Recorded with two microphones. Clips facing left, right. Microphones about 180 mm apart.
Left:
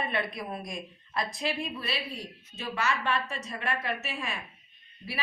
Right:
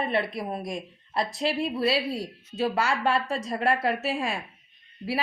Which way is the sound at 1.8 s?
90° right.